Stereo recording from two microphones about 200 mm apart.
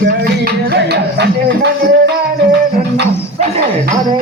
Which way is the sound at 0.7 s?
60° right (ahead or behind).